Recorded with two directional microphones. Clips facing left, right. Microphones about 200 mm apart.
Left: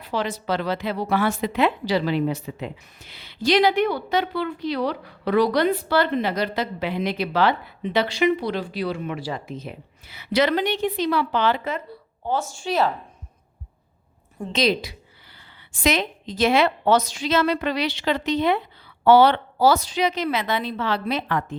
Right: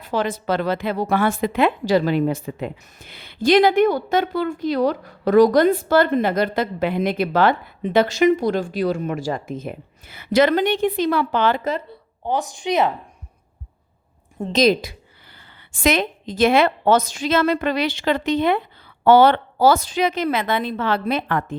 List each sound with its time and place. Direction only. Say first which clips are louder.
0.0 s a woman's voice: right 4 dB; 50° right (ahead or behind)
12.2 s speech: right 2 dB; 15° right (ahead or behind)
14.5 s a woman's voice: right 5 dB; 45° right (ahead or behind)